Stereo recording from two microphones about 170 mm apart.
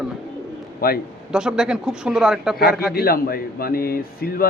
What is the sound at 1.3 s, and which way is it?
Speech, 5° right (ahead or behind).